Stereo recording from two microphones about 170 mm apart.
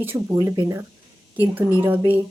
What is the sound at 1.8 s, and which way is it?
Speech, 10° right (ahead or behind).